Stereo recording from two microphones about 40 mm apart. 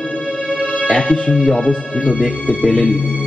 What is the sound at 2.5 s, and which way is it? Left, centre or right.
Speech, left.